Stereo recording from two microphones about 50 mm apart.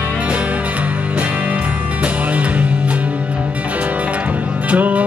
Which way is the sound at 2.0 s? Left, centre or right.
Right.